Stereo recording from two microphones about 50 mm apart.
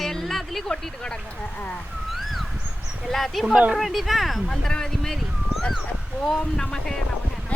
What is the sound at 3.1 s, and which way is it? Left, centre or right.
Speech, centre.